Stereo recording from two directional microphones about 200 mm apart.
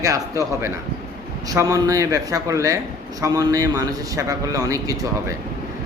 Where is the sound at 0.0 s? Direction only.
15° right (ahead or behind).